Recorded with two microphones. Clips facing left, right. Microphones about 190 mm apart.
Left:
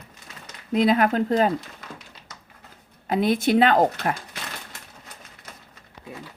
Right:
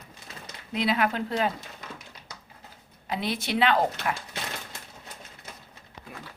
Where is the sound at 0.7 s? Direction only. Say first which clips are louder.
Left 7 dB; 45° left (ahead or behind).